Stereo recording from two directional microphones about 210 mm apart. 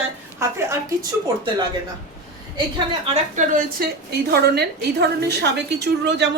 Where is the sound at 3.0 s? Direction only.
30° right (ahead or behind).